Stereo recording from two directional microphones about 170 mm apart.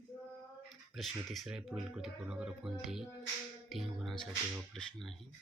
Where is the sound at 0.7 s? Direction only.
Centre (ahead or behind).